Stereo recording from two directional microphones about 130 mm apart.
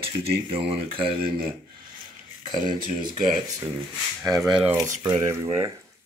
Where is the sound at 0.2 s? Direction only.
45° right (ahead or behind).